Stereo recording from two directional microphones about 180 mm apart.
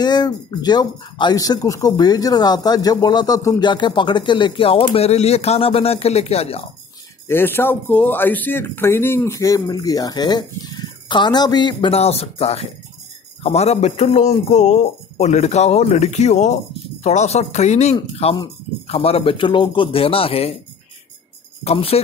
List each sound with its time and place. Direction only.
0.0 s a man's voice: 25° left (ahead or behind)
7.2 s a man's voice: 10° left (ahead or behind); by 20.5 s 30° left (ahead or behind)
21.6 s a man's voice: 35° left (ahead or behind)